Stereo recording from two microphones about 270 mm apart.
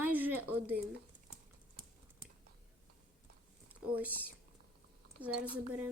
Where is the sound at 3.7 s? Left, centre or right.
Centre.